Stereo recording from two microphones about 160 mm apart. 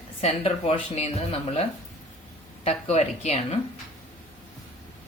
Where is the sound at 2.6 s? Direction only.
45° left (ahead or behind).